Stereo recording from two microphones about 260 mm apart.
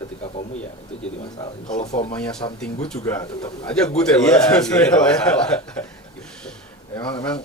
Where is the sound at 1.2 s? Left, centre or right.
Left.